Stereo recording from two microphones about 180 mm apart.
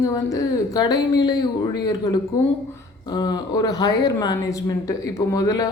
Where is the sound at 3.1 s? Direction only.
20° left (ahead or behind).